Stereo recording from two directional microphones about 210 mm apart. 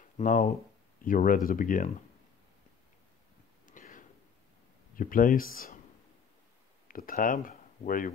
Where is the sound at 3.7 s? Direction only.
40° left (ahead or behind).